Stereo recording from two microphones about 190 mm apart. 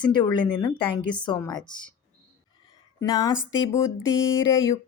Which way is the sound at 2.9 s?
20° left (ahead or behind).